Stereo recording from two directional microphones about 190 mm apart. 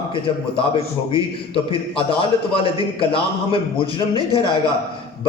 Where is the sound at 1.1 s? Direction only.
30° left (ahead or behind).